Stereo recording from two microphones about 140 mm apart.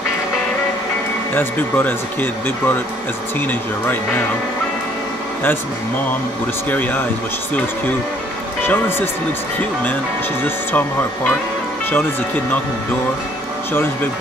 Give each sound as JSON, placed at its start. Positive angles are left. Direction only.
{"t": 1.3, "sound": "speech", "side_deg": 15}
{"t": 6.7, "sound": "speech", "side_deg": 10}
{"t": 8.6, "sound": "speech", "side_deg": 15}
{"t": 10.4, "sound": "speech", "side_deg": 15}